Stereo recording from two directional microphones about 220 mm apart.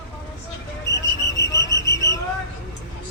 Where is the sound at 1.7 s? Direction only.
15° left (ahead or behind).